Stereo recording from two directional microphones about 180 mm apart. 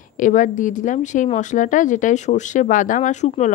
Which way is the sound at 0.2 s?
45° left (ahead or behind).